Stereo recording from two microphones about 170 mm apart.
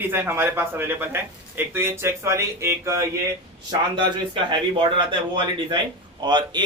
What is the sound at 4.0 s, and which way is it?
Speech, 30° right (ahead or behind).